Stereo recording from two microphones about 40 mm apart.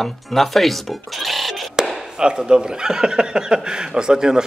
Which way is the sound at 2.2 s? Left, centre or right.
Right.